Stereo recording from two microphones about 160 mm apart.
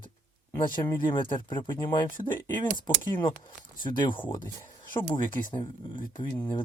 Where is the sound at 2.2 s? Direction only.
10° left (ahead or behind).